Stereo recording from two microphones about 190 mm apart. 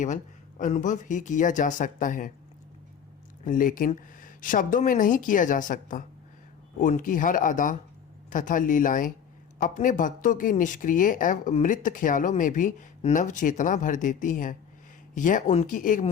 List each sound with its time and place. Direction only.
0.6 s speech: 40° left (ahead or behind)
3.4 s speech: 45° left (ahead or behind)